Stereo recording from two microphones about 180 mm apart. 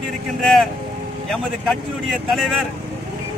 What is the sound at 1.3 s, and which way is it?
Speech, 5° left (ahead or behind).